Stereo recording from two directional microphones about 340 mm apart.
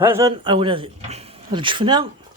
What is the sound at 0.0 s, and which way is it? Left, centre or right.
Speech, centre.